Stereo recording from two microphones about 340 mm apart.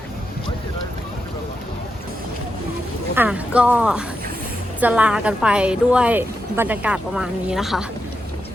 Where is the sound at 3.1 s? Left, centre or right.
Centre.